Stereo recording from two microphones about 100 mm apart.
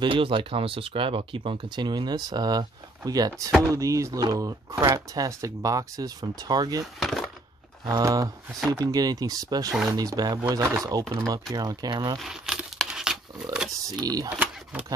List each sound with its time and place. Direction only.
0.0 s speech: 60° right (ahead or behind); by 6.8 s 40° right (ahead or behind)
7.0 s wood: centre (ahead or behind)
7.8 s speech: 40° right (ahead or behind)
12.2 s crumpling: 5° right (ahead or behind)
14.0 s speech: 40° right (ahead or behind)